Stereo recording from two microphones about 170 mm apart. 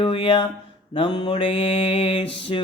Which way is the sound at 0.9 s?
30° left (ahead or behind).